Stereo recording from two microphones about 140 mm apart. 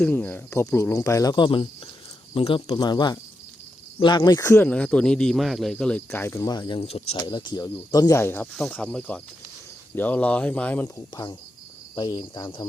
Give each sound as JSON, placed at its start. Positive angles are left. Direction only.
{"t": 0.1, "sound": "speech", "side_deg": 15}
{"t": 4.7, "sound": "speech", "side_deg": 10}
{"t": 7.3, "sound": "speech", "side_deg": 30}
{"t": 8.5, "sound": "speech", "side_deg": 5}
{"t": 10.8, "sound": "speech", "side_deg": 25}